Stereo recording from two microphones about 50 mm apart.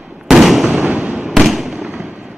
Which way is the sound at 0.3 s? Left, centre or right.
Centre.